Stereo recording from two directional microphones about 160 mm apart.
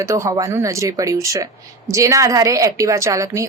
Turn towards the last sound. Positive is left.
turn(degrees=-20)  # may be behind; listen again after turning